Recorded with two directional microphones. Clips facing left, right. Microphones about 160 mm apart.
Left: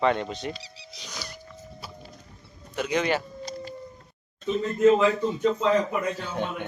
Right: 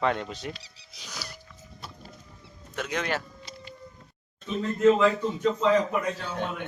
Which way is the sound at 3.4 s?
40° left (ahead or behind).